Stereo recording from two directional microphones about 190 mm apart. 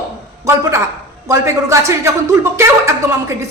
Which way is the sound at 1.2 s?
15° right (ahead or behind).